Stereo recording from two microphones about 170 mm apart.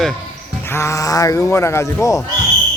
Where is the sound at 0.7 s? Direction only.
15° left (ahead or behind).